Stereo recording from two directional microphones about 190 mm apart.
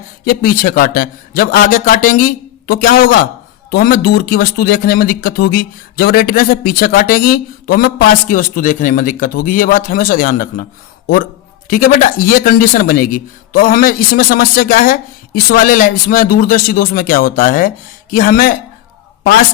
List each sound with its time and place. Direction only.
0.3 s speech: 50° left (ahead or behind)
11.7 s speech: 45° left (ahead or behind)